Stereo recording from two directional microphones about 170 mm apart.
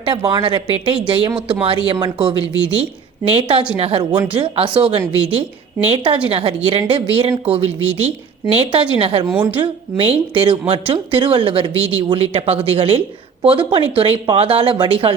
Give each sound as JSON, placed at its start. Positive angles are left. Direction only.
{"t": 0.0, "sound": "speech", "side_deg": -25}
{"t": 9.2, "sound": "a woman's voice", "side_deg": -10}
{"t": 9.6, "sound": "speech", "side_deg": -30}